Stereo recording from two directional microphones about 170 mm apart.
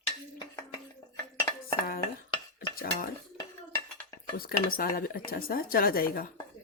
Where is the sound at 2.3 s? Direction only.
25° left (ahead or behind).